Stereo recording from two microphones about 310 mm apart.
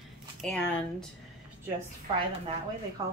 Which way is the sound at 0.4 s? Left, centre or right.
Centre.